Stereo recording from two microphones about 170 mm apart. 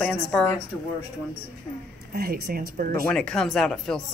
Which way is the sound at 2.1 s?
65° right (ahead or behind).